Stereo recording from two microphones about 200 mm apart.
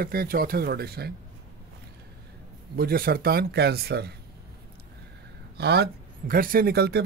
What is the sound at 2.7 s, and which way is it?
Speech, 45° right (ahead or behind).